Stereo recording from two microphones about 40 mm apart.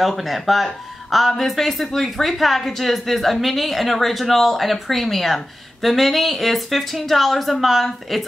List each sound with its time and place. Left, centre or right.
0.0 s speech: centre